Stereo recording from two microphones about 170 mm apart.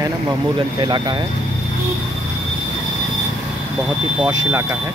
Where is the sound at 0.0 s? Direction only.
25° right (ahead or behind).